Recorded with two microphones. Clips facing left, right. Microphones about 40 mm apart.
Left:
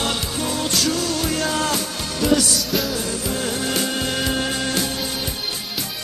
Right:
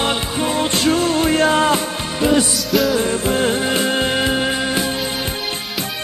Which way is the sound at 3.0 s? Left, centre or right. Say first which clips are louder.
Right 7 dB; right.